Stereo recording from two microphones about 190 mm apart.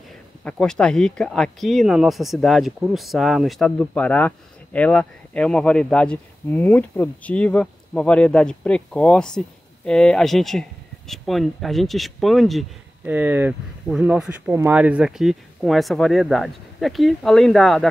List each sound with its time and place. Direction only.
0.4 s speech: 5° left (ahead or behind)
13.1 s speech: 10° right (ahead or behind)